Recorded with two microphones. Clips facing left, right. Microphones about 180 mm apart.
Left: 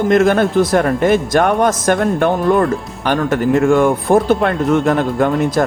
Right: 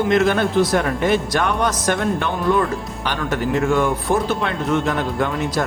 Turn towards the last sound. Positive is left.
turn(degrees=50)  # may be behind; listen again after turning